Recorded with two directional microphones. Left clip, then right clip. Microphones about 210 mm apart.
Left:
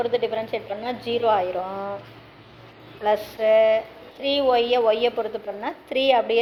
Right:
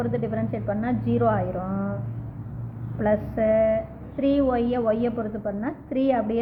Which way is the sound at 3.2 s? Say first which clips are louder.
Left 5 dB; 20° left (ahead or behind).